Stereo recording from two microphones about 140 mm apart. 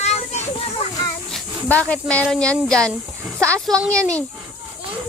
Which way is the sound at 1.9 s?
10° left (ahead or behind).